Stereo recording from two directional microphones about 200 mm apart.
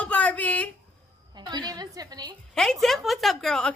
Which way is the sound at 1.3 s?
20° right (ahead or behind).